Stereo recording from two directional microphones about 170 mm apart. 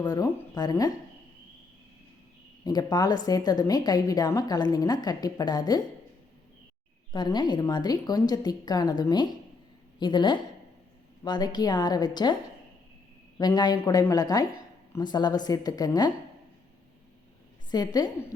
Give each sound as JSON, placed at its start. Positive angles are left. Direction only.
{"t": 0.0, "sound": "a woman's voice", "side_deg": 20}
{"t": 2.6, "sound": "a woman's voice", "side_deg": 25}
{"t": 7.1, "sound": "a woman's voice", "side_deg": 25}
{"t": 13.4, "sound": "a woman's voice", "side_deg": 25}
{"t": 17.7, "sound": "a woman's voice", "side_deg": 25}